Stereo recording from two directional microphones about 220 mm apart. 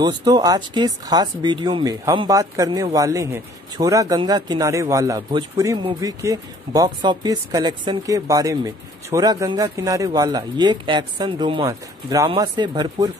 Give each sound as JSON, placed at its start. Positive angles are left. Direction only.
{"t": 0.0, "sound": "speech", "side_deg": -20}